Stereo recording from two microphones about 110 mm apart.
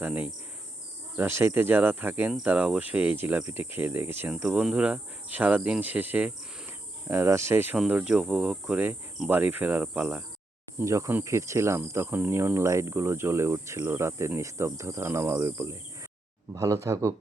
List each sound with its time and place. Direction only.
0.0 s speech: 15° right (ahead or behind)
3.4 s cricket: 20° right (ahead or behind)
4.4 s speech: 5° right (ahead or behind)
10.8 s cricket: 25° right (ahead or behind)